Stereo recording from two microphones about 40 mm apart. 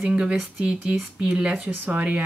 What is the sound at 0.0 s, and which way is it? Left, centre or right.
Speech, right.